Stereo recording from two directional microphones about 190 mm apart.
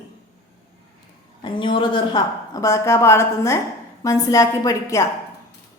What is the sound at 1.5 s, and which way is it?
A woman's voice, 25° left (ahead or behind).